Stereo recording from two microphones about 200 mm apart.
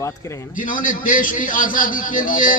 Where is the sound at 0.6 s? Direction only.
45° left (ahead or behind).